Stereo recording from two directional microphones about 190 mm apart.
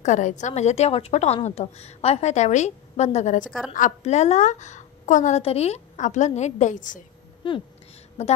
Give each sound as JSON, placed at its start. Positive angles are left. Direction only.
{"t": 0.0, "sound": "a woman's voice", "side_deg": 40}
{"t": 3.4, "sound": "a woman's voice", "side_deg": 0}
{"t": 3.7, "sound": "a woman's voice", "side_deg": 40}
{"t": 7.4, "sound": "a sound", "side_deg": 25}